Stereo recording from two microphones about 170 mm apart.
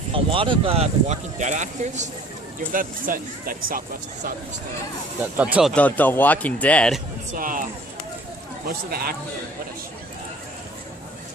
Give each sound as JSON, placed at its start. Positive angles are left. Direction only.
{"t": 0.1, "sound": "speech", "side_deg": -30}
{"t": 5.4, "sound": "speech", "side_deg": -5}
{"t": 5.7, "sound": "speech", "side_deg": 10}
{"t": 7.3, "sound": "speech", "side_deg": -55}